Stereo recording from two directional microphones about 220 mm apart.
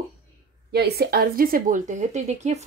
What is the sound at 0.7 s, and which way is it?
A woman's voice, 45° right (ahead or behind).